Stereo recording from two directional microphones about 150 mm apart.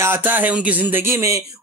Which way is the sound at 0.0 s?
15° right (ahead or behind).